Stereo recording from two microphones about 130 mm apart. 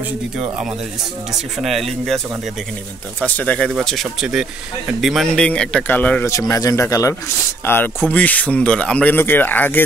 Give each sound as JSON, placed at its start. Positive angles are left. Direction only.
{"t": 0.4, "sound": "speech", "side_deg": -5}
{"t": 3.2, "sound": "speech", "side_deg": 10}
{"t": 6.3, "sound": "speech", "side_deg": 25}